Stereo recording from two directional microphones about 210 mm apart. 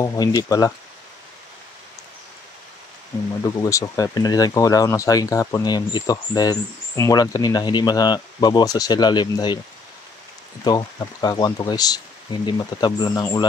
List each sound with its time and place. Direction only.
0.0 s speech: 15° left (ahead or behind)
3.6 s speech: 15° left (ahead or behind)
10.6 s speech: 20° left (ahead or behind)